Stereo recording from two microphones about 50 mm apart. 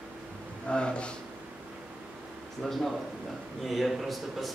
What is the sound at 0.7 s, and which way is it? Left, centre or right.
Speech, centre.